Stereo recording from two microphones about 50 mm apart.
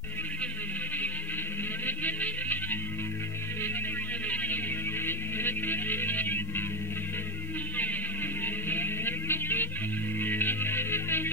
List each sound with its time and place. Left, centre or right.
1.9 s music: left
4.3 s music: left
5.0 s music: left
8.6 s music: left